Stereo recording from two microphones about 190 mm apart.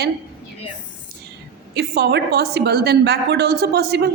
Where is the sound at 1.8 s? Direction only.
60° right (ahead or behind).